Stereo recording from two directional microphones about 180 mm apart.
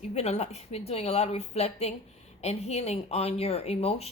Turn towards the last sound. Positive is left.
turn(degrees=35)  # may be behind; listen again after turning